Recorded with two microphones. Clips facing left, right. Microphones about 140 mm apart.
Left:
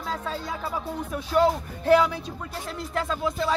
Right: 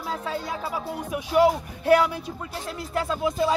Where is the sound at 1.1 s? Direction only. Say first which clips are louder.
Right 2 dB; 10° right (ahead or behind).